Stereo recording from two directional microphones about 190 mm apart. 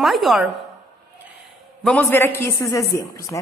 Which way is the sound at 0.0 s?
Centre (ahead or behind).